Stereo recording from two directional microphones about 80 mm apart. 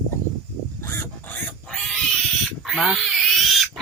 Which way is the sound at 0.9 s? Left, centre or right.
Left.